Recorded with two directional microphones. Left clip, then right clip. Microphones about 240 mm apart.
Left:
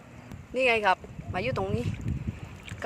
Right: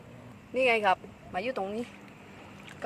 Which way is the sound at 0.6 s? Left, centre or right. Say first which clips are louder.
Left 1 dB; centre.